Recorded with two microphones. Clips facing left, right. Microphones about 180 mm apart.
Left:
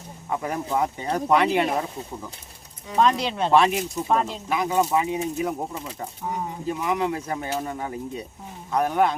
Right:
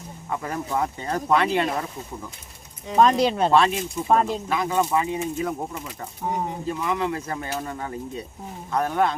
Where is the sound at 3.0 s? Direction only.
45° right (ahead or behind).